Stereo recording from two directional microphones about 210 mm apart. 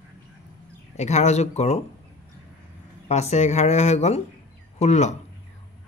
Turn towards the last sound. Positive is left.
turn(degrees=30)  # may be behind; listen again after turning